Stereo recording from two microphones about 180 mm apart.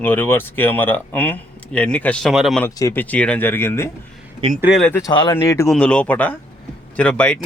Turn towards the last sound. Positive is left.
turn(degrees=5)  # may be behind; listen again after turning